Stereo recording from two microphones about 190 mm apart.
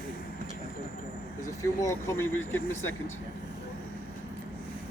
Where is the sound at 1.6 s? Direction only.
15° left (ahead or behind).